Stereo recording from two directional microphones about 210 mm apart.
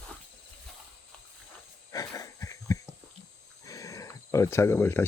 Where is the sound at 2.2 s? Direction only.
15° left (ahead or behind).